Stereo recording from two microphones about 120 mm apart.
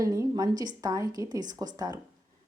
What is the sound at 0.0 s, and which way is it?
A woman's voice, 30° right (ahead or behind).